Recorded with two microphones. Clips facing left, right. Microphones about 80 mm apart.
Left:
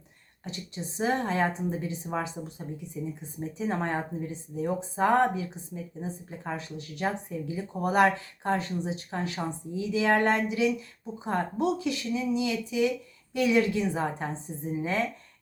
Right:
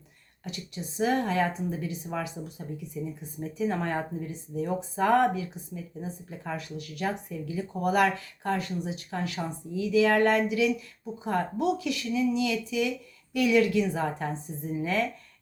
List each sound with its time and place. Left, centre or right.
0.4 s speech: left